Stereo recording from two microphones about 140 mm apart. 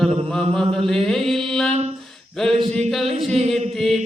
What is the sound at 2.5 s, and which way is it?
Speech, 45° right (ahead or behind).